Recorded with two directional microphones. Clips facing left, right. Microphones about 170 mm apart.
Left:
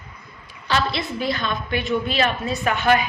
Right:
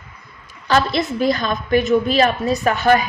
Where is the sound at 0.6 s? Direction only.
45° right (ahead or behind).